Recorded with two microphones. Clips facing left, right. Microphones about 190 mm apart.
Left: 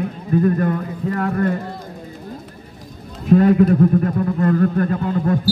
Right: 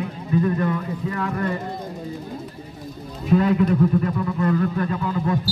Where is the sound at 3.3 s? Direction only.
50° left (ahead or behind).